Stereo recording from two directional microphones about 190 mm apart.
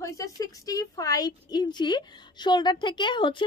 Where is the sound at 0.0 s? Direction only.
20° left (ahead or behind).